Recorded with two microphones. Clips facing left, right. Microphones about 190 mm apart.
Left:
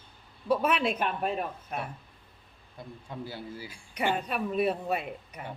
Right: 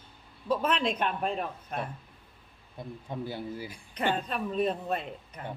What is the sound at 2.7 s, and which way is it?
Speech, 20° right (ahead or behind).